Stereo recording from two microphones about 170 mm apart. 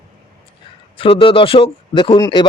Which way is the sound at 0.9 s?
30° left (ahead or behind).